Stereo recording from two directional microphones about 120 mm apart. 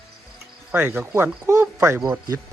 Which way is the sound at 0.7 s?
20° right (ahead or behind).